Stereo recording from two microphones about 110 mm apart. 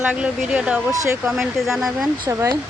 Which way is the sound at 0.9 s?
30° right (ahead or behind).